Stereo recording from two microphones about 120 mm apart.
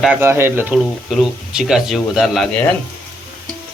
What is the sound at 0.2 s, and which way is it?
Speech, 20° right (ahead or behind).